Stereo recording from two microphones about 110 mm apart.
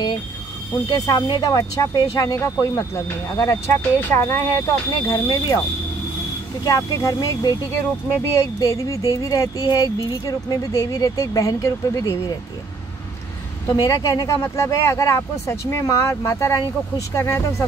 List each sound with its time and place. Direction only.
0.8 s speech: 35° left (ahead or behind)
6.6 s speech: 35° left (ahead or behind)
13.7 s speech: 30° left (ahead or behind)